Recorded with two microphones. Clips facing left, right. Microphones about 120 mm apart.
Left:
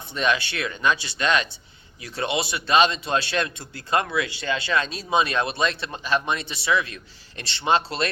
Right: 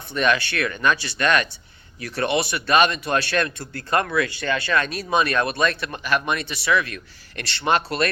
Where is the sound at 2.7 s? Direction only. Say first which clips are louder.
Right 1 dB; 55° right (ahead or behind).